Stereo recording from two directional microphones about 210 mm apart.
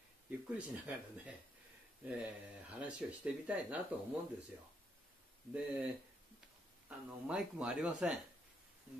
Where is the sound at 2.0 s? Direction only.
5° right (ahead or behind).